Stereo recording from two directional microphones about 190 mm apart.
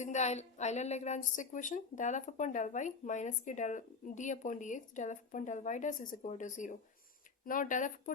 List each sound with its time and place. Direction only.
0.0 s a woman's voice: 35° left (ahead or behind)